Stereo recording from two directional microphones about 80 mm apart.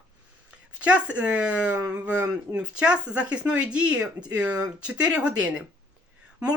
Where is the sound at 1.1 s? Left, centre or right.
Centre.